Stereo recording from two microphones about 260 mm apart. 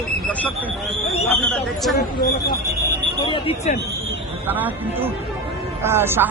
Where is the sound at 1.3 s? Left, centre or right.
Centre.